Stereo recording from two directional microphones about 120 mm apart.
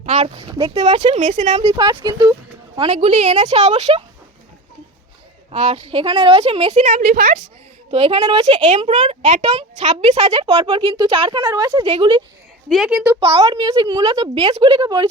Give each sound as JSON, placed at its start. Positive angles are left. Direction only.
{"t": 0.2, "sound": "a woman's voice", "side_deg": -45}
{"t": 0.6, "sound": "a woman's voice", "side_deg": -55}
{"t": 1.7, "sound": "a child's voice", "side_deg": -40}
{"t": 2.9, "sound": "a woman's voice", "side_deg": -65}
{"t": 5.5, "sound": "a woman's voice", "side_deg": -60}
{"t": 7.9, "sound": "a woman's voice", "side_deg": -55}
{"t": 11.9, "sound": "a woman's voice", "side_deg": -45}
{"t": 12.6, "sound": "a woman's voice", "side_deg": 0}
{"t": 12.9, "sound": "a child's voice", "side_deg": -10}
{"t": 13.1, "sound": "a child's voice", "side_deg": -55}
{"t": 14.3, "sound": "a woman's voice", "side_deg": -60}
{"t": 14.6, "sound": "a child's voice", "side_deg": -40}